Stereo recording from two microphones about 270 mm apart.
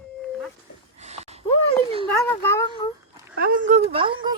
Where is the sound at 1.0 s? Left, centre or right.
Right.